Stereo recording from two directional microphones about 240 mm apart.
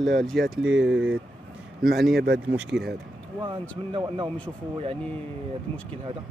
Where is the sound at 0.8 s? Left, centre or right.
Right.